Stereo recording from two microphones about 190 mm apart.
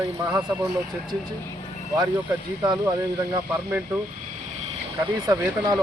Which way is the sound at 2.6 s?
20° right (ahead or behind).